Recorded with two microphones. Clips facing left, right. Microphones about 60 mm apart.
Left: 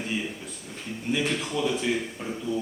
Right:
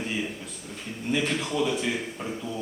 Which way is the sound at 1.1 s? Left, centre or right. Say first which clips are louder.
Right 1 dB; centre.